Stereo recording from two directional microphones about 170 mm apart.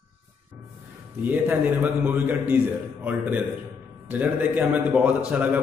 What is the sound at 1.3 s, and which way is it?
A man's voice, 10° right (ahead or behind).